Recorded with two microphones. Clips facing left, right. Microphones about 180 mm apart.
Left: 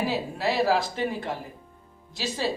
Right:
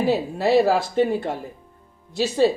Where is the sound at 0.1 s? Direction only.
55° right (ahead or behind).